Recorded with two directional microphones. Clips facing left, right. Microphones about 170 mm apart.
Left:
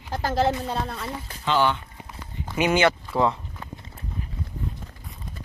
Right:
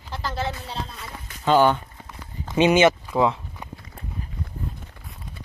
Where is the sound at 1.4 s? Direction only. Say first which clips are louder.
Right 5 dB; 45° right (ahead or behind).